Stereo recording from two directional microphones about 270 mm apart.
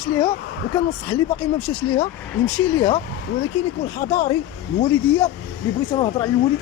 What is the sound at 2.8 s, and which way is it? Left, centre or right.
Speech, centre.